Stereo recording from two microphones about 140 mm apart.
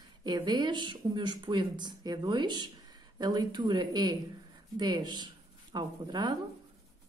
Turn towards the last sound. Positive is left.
turn(degrees=-30)  # may be behind; listen again after turning